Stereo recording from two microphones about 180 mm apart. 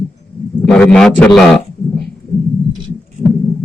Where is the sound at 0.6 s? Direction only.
5° left (ahead or behind).